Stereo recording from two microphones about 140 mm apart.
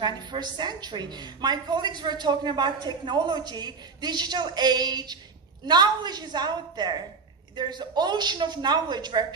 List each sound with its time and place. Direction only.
0.0 s a woman's voice: 30° right (ahead or behind)